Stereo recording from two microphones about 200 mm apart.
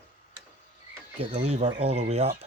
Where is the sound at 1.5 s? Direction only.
35° right (ahead or behind).